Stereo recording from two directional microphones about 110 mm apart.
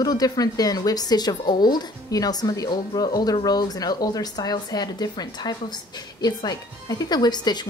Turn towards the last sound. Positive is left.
turn(degrees=40)  # may be behind; listen again after turning